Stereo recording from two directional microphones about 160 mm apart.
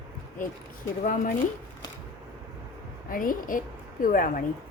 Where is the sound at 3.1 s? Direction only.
60° left (ahead or behind).